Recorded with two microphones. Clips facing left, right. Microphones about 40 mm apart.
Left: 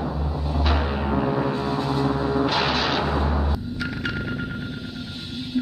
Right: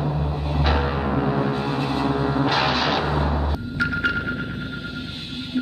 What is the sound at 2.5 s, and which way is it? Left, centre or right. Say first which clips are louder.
Music: right 2 dB; centre.